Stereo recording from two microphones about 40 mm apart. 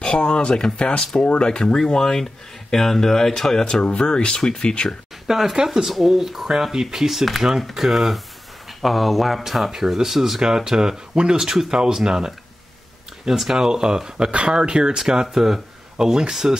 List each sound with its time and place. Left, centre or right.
0.0 s speech: left
3.8 s speech: left
5.2 s speech: centre
10.4 s speech: centre